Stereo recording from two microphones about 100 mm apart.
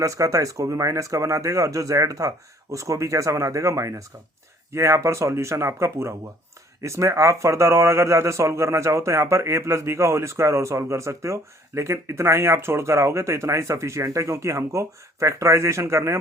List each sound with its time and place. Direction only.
0.0 s speech: 35° right (ahead or behind)